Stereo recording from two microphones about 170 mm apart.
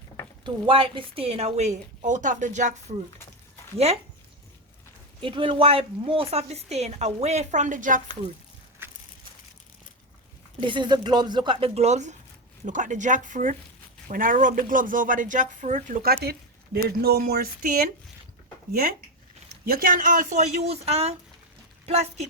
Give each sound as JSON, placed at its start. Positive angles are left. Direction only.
{"t": 0.4, "sound": "a woman's voice", "side_deg": -30}
{"t": 5.2, "sound": "a woman's voice", "side_deg": -30}
{"t": 8.8, "sound": "crushing", "side_deg": -10}
{"t": 10.6, "sound": "speech", "side_deg": -30}
{"t": 19.6, "sound": "a woman's voice", "side_deg": -60}